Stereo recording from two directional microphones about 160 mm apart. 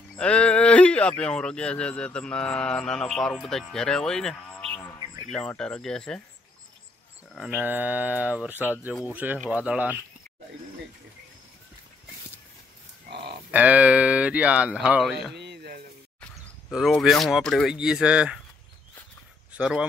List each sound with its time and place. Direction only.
0.2 s speech: 5° left (ahead or behind)
7.3 s speech: 5° right (ahead or behind)
13.1 s a sound: 90° right
13.5 s speech: 10° right (ahead or behind)
15.3 s a sound: 90° right
16.7 s speech: centre (ahead or behind)
19.5 s speech: 5° right (ahead or behind)